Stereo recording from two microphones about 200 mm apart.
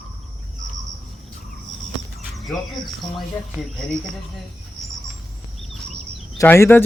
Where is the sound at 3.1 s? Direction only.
Centre (ahead or behind).